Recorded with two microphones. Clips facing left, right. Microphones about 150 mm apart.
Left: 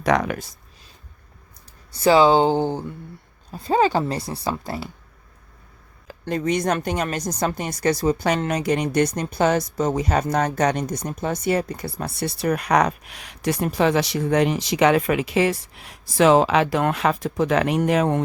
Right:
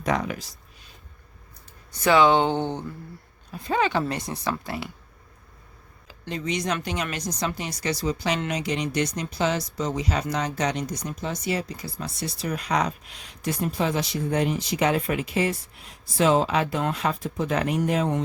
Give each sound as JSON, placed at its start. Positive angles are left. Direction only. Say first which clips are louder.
{"t": 0.0, "sound": "speech", "louder": "left 5 dB", "side_deg": 75}
{"t": 1.9, "sound": "speech", "louder": "left 3 dB", "side_deg": 30}
{"t": 6.1, "sound": "speech", "louder": "left 7 dB", "side_deg": 50}